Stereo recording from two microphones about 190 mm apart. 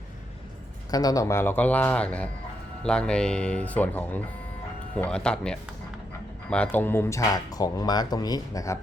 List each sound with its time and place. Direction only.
0.9 s speech: 20° left (ahead or behind)